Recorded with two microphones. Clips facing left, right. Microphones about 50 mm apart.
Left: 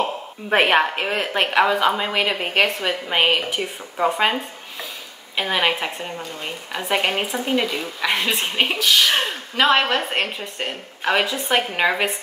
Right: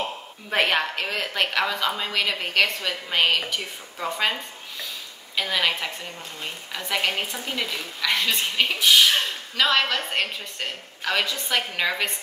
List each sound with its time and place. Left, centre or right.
0.5 s speech: left
8.8 s speech: centre
9.1 s speech: left